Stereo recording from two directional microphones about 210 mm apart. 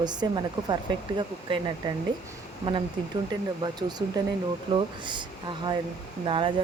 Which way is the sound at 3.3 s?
20° right (ahead or behind).